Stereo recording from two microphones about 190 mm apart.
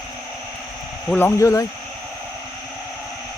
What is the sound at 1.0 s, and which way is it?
Speech, 10° left (ahead or behind).